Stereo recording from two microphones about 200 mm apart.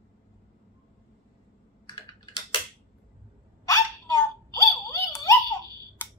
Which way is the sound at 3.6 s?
15° left (ahead or behind).